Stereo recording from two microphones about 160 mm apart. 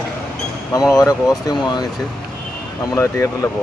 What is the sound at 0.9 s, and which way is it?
Speech, 20° left (ahead or behind).